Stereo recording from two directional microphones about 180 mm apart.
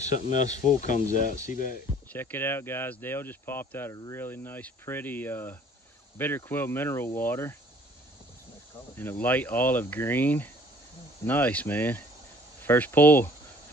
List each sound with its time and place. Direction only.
0.0 s speech: 40° left (ahead or behind)
2.0 s speech: 10° left (ahead or behind)
8.9 s speech: 10° left (ahead or behind)